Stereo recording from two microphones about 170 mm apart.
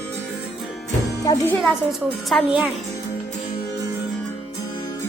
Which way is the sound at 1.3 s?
20° left (ahead or behind).